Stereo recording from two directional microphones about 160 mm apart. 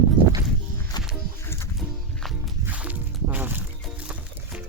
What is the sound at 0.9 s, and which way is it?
Music, 25° left (ahead or behind).